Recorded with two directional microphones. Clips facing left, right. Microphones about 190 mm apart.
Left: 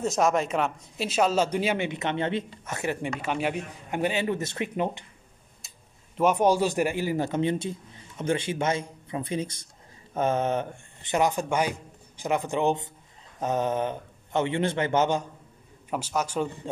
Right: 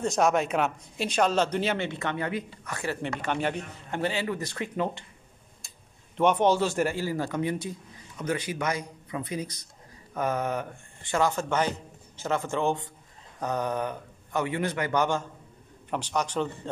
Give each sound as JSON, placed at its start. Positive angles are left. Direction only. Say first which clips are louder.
{"t": 0.0, "sound": "speech", "louder": "even", "side_deg": 0}
{"t": 3.0, "sound": "speech", "louder": "left 1 dB", "side_deg": 5}
{"t": 6.1, "sound": "a man's voice", "louder": "left 1 dB", "side_deg": 5}
{"t": 15.9, "sound": "speech", "louder": "left 1 dB", "side_deg": 5}